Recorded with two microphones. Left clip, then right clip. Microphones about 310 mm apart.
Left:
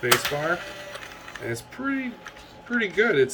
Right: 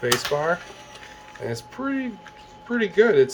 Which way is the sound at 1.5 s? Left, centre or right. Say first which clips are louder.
Right 1 dB; centre.